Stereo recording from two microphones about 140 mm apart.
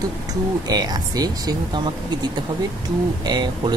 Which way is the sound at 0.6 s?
30° right (ahead or behind).